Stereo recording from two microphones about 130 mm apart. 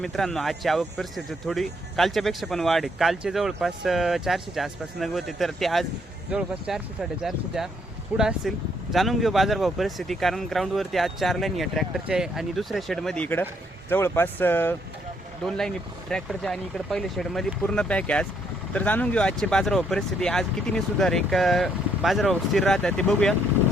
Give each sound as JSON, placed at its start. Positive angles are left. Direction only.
{"t": 0.0, "sound": "speech", "side_deg": 0}
{"t": 15.4, "sound": "speech", "side_deg": 5}